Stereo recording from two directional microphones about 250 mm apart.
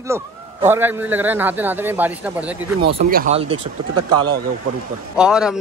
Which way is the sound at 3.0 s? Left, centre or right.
Right.